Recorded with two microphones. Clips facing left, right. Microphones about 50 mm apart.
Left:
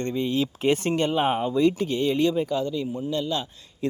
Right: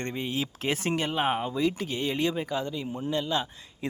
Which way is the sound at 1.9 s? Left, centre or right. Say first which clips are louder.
Left 6 dB; centre.